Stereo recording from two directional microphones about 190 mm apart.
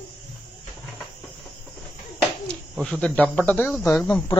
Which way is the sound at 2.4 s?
5° left (ahead or behind).